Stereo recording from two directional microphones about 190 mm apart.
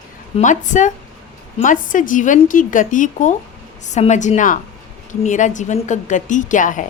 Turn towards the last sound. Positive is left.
turn(degrees=40)  # may be behind; listen again after turning